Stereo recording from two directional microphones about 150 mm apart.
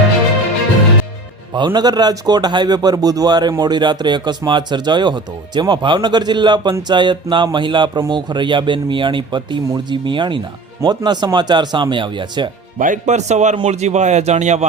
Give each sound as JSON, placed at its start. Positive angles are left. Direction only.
{"t": 1.5, "sound": "a man's voice", "side_deg": -30}
{"t": 12.8, "sound": "speech", "side_deg": -55}